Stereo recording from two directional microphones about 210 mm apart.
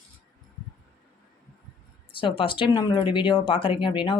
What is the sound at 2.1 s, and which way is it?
Speech, 25° left (ahead or behind).